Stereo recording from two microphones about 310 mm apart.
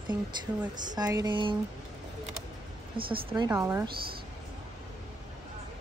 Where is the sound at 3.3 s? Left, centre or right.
Centre.